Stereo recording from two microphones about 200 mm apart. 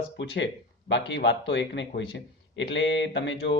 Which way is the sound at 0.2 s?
65° left (ahead or behind).